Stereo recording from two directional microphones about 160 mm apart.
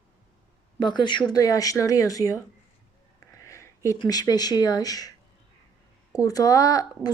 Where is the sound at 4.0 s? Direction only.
25° left (ahead or behind).